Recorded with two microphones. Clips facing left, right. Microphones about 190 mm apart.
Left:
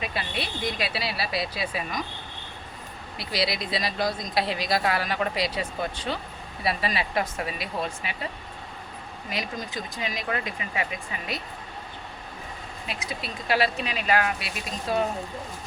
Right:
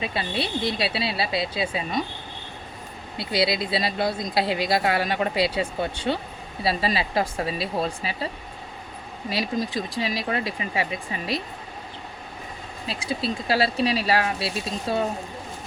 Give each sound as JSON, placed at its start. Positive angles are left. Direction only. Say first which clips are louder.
{"t": 0.0, "sound": "speech", "louder": "right 4 dB", "side_deg": -25}
{"t": 3.2, "sound": "speech", "louder": "right 5 dB", "side_deg": -25}
{"t": 9.3, "sound": "speech", "louder": "right 6 dB", "side_deg": -30}
{"t": 12.9, "sound": "speech", "louder": "right 8 dB", "side_deg": -30}